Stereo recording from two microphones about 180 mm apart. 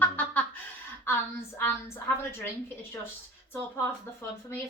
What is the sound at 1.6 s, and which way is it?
Speech, 10° left (ahead or behind).